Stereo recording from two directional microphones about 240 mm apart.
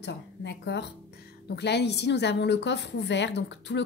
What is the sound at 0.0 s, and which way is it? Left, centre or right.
A woman's voice, left.